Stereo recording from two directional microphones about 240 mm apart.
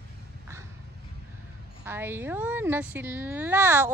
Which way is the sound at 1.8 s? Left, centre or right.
Centre.